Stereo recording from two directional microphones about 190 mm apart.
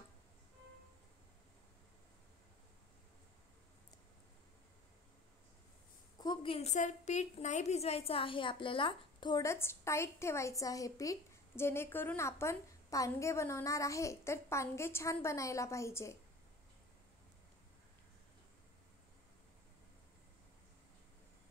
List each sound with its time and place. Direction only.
6.1 s a woman's voice: 20° left (ahead or behind)